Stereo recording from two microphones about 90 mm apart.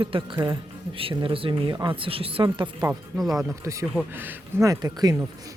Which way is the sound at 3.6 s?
35° right (ahead or behind).